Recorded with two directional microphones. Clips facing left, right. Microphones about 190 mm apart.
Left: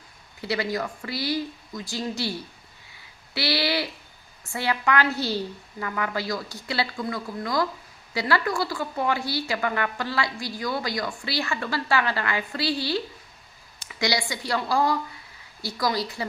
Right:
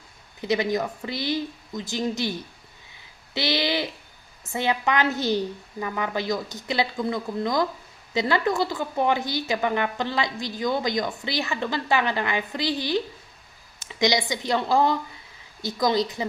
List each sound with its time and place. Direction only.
0.4 s a woman's voice: 20° right (ahead or behind)